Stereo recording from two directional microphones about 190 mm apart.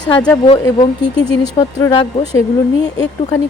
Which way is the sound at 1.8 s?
25° left (ahead or behind).